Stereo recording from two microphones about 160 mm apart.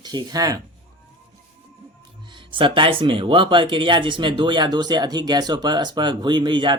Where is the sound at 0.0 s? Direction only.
25° right (ahead or behind).